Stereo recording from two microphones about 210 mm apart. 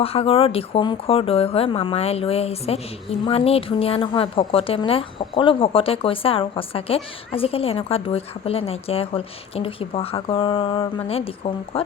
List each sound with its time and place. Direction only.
0.0 s speech: 25° left (ahead or behind)